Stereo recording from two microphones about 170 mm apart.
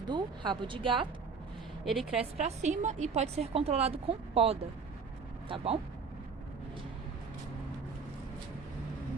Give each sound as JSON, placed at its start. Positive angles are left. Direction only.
{"t": 0.1, "sound": "speech", "side_deg": -25}
{"t": 1.8, "sound": "a woman's voice", "side_deg": 0}
{"t": 2.1, "sound": "a woman's voice", "side_deg": -40}